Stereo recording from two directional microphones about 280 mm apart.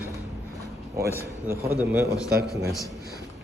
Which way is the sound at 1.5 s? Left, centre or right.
Centre.